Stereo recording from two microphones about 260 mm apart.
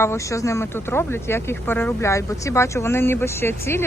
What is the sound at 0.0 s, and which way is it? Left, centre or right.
Speech, centre.